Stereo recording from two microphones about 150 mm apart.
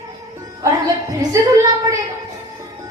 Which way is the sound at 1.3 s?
20° right (ahead or behind).